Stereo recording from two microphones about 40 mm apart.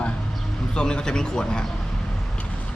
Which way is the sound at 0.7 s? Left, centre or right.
Left.